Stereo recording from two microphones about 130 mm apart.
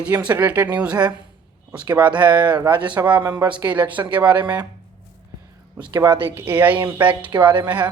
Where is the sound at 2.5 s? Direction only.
35° right (ahead or behind).